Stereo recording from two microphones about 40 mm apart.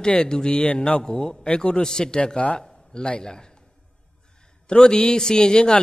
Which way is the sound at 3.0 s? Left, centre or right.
Left.